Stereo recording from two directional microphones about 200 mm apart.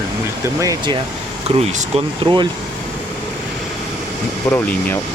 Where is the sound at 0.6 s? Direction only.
15° right (ahead or behind).